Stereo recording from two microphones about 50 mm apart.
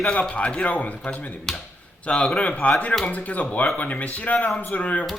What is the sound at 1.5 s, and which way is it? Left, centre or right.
Speech, centre.